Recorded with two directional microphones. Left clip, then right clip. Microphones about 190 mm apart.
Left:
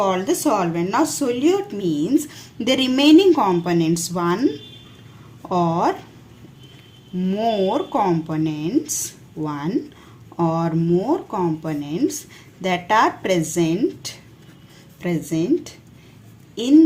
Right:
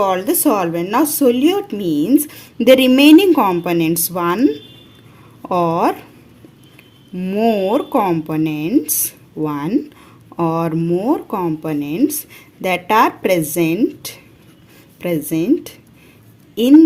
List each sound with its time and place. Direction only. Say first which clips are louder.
0.0 s speech: right 4 dB; 30° right (ahead or behind)
7.2 s speech: right 4 dB; 35° right (ahead or behind)